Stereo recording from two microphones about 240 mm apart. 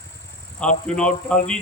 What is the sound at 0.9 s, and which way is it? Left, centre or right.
Speech, centre.